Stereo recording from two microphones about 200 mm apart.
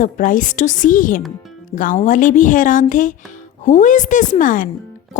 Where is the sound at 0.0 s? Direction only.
40° left (ahead or behind).